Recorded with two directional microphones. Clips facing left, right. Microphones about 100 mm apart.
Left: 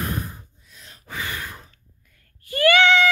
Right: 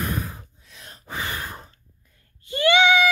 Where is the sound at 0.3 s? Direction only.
90° right.